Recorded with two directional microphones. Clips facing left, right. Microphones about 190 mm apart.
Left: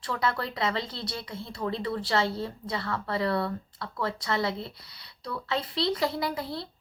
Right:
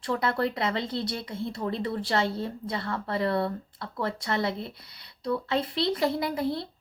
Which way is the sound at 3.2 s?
20° right (ahead or behind).